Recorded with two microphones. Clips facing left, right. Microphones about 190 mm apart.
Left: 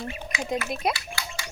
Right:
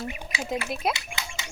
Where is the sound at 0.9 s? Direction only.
20° right (ahead or behind).